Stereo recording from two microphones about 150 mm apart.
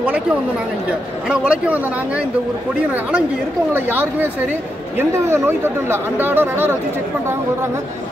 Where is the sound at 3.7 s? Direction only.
15° right (ahead or behind).